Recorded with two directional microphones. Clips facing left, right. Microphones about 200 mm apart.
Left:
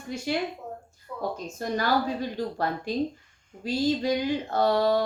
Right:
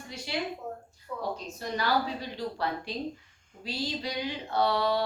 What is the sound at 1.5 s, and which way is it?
A woman's voice, 45° left (ahead or behind).